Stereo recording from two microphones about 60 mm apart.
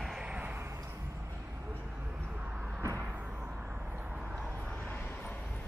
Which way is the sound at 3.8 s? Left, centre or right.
Right.